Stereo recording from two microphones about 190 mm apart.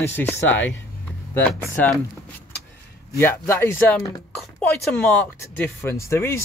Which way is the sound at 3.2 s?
10° left (ahead or behind).